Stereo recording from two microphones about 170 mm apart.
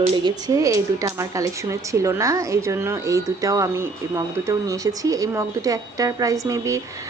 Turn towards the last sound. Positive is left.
turn(degrees=-20)  # may be behind; listen again after turning